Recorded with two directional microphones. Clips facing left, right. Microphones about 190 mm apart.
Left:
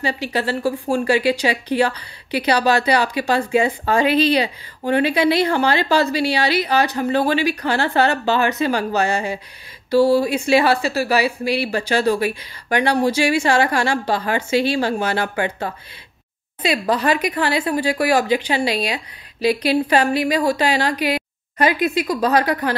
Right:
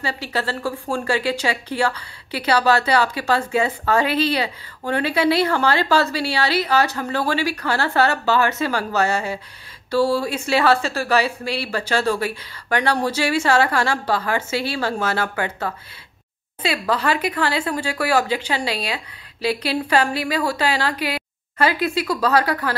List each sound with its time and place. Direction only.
0.0 s speech: 15° left (ahead or behind)